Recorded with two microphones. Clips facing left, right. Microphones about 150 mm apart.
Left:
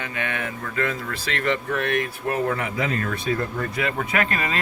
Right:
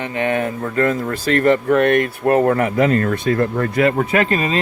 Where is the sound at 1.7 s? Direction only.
55° right (ahead or behind).